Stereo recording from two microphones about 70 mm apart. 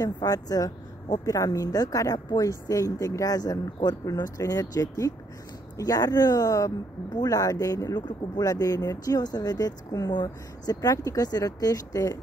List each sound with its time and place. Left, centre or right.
0.0 s speech: left